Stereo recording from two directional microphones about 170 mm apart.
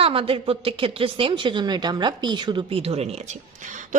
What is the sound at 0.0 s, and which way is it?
A woman's voice, 35° right (ahead or behind).